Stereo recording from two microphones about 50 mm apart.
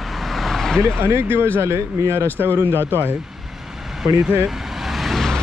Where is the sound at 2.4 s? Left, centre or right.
Right.